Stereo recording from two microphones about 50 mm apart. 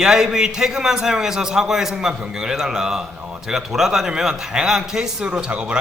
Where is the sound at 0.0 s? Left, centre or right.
Centre.